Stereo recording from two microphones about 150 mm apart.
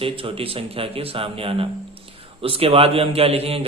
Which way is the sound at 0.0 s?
40° right (ahead or behind).